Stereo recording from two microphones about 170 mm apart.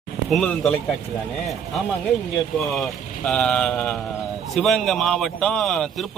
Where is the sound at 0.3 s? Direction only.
5° left (ahead or behind).